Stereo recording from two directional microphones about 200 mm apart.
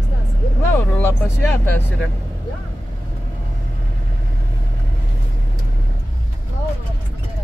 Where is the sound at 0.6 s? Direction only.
10° left (ahead or behind).